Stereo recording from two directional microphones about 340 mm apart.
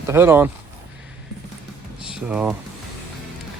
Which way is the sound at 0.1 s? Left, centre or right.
Centre.